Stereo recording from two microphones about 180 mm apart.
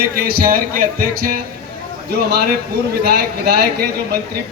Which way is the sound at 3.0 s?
60° right (ahead or behind).